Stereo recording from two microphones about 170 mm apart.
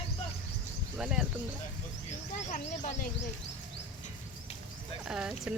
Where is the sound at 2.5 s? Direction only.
50° left (ahead or behind).